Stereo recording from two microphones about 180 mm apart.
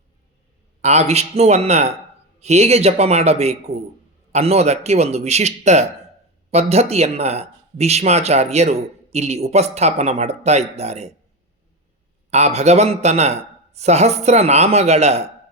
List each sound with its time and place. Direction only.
0.8 s speech: 40° right (ahead or behind)
12.3 s speech: 40° right (ahead or behind)